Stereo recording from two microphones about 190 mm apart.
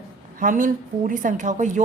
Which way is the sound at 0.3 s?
45° right (ahead or behind).